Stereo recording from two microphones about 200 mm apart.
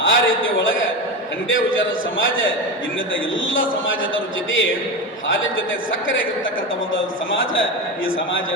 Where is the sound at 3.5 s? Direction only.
75° left (ahead or behind).